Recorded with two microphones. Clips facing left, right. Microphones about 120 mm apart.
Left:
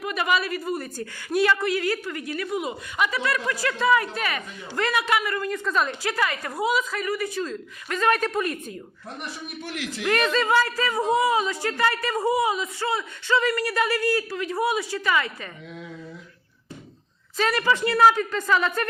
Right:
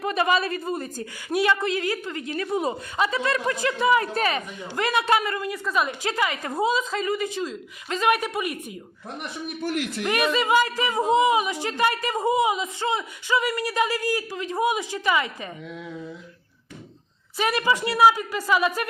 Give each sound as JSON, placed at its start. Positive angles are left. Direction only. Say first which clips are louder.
{"t": 0.0, "sound": "a woman's voice", "louder": "right 2 dB", "side_deg": -30}
{"t": 4.0, "sound": "a woman's voice", "louder": "right 4 dB", "side_deg": -30}
{"t": 5.4, "sound": "speech", "louder": "left 1 dB", "side_deg": -10}
{"t": 6.0, "sound": "a woman's voice", "louder": "even", "side_deg": -20}
{"t": 10.1, "sound": "speech", "louder": "even", "side_deg": -15}
{"t": 17.3, "sound": "speech", "louder": "even", "side_deg": -15}